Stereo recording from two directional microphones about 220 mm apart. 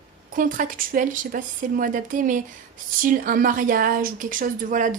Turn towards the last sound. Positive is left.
turn(degrees=-35)  # may be behind; listen again after turning